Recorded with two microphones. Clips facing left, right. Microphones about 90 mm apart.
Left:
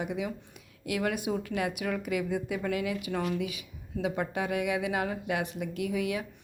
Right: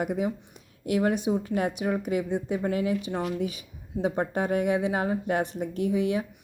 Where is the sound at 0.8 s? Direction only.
35° right (ahead or behind).